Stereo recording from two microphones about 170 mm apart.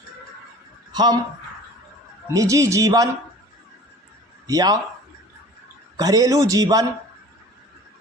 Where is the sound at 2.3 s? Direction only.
20° right (ahead or behind).